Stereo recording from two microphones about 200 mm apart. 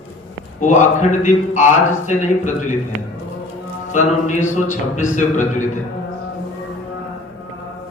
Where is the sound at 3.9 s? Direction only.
40° left (ahead or behind).